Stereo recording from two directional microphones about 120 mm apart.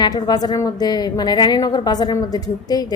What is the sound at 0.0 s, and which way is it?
A woman's voice, 35° left (ahead or behind).